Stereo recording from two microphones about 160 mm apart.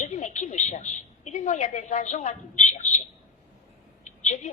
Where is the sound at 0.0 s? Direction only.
50° left (ahead or behind).